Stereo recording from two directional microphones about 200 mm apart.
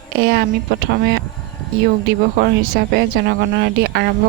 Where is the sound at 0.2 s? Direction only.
55° right (ahead or behind).